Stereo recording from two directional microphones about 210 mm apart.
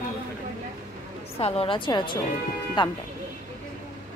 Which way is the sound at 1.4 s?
25° left (ahead or behind).